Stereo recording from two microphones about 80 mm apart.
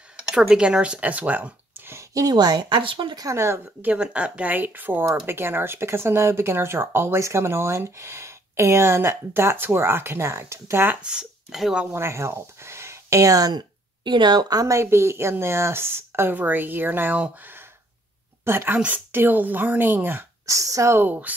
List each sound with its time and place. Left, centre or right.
0.3 s speech: centre
1.9 s a sound: right
2.2 s speech: right
3.2 s speech: right
3.8 s speech: centre; by 11.0 s right
11.0 s speech: centre
11.9 s speech: right
20.4 s speech: right
21.0 s speech: centre